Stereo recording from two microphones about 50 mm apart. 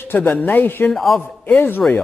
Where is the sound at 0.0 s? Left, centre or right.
Left.